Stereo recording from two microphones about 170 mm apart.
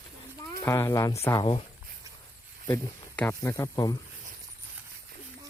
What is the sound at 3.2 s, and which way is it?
Speech, 15° left (ahead or behind).